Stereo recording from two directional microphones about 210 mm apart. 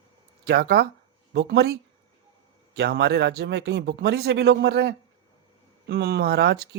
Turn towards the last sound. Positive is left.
turn(degrees=-50)  # may be behind; listen again after turning